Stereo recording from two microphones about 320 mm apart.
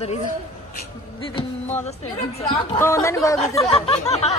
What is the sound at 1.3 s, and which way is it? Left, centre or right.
Speech, centre.